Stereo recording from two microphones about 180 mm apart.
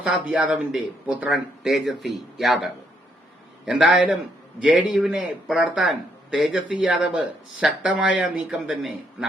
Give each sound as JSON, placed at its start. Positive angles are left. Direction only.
{"t": 0.0, "sound": "a man's voice", "side_deg": -5}
{"t": 3.7, "sound": "a man's voice", "side_deg": -5}